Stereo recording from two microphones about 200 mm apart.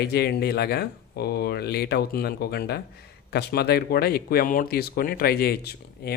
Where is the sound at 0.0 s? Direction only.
55° left (ahead or behind).